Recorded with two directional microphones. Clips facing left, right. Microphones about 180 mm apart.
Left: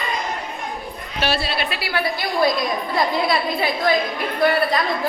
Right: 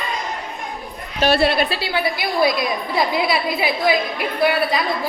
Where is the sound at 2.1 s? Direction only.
10° right (ahead or behind).